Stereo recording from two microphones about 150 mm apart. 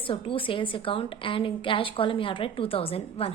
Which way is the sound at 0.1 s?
35° left (ahead or behind).